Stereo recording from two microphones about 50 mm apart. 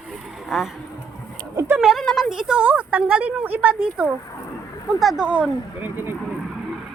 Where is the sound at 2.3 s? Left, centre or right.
Centre.